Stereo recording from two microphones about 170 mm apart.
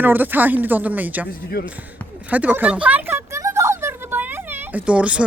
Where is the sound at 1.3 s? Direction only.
65° left (ahead or behind).